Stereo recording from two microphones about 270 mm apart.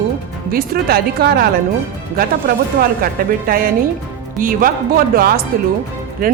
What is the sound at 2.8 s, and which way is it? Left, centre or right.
A man's voice, right.